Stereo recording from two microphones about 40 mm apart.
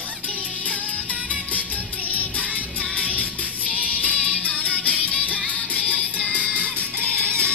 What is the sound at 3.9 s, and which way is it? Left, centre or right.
Music, right.